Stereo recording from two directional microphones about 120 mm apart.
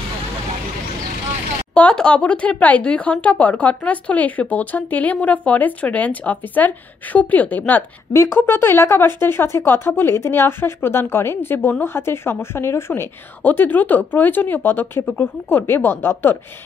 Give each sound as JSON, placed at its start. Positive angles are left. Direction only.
{"t": 1.7, "sound": "a woman's voice", "side_deg": 10}